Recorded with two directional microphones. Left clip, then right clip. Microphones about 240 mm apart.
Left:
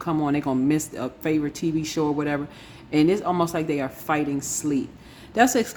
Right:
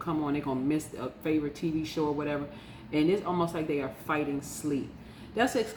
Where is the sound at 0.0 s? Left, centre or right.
Left.